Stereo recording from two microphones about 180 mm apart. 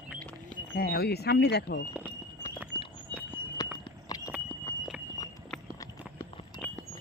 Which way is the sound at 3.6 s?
20° left (ahead or behind).